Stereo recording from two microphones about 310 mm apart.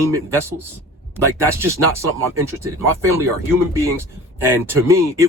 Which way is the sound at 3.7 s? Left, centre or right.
Centre.